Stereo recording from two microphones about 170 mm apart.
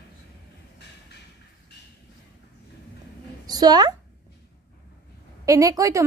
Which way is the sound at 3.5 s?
25° right (ahead or behind).